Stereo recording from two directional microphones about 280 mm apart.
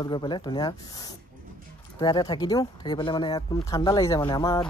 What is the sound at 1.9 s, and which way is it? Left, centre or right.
Speech, centre.